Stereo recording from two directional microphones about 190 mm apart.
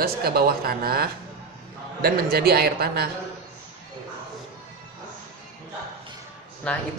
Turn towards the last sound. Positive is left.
turn(degrees=5)  # may be behind; listen again after turning